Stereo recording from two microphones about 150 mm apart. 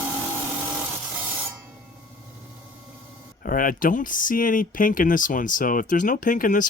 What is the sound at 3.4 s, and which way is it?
Speech, 65° left (ahead or behind).